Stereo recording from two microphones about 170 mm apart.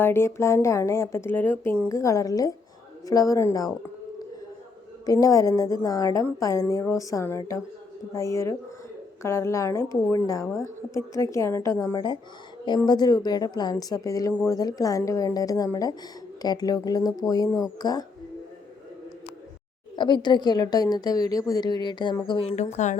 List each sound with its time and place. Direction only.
0.0 s a woman's voice: 15° left (ahead or behind)
5.0 s a woman's voice: 20° left (ahead or behind)
20.0 s a woman's voice: 25° left (ahead or behind); by 23.0 s 45° left (ahead or behind)